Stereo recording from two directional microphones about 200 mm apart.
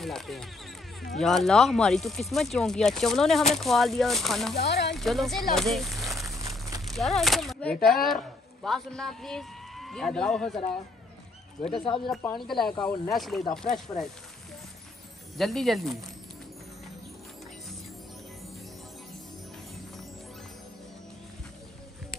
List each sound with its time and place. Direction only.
0.0 s speech: centre (ahead or behind)
4.6 s speech: 55° left (ahead or behind)
4.9 s speech: centre (ahead or behind)
6.3 s crumpling: 15° right (ahead or behind)
6.9 s speech: centre (ahead or behind)
12.1 s speech: centre (ahead or behind)
12.7 s speech: 20° left (ahead or behind)
13.1 s speech: centre (ahead or behind)
15.3 s speech: centre (ahead or behind)